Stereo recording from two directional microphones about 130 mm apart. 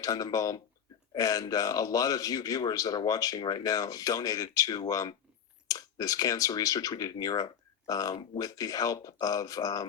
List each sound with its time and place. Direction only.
0.0 s speech: 25° left (ahead or behind)